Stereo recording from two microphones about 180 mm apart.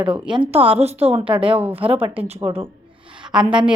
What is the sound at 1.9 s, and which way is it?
Speech, 10° right (ahead or behind).